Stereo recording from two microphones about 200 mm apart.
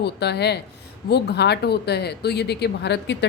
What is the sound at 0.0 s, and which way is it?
Speech, 55° left (ahead or behind).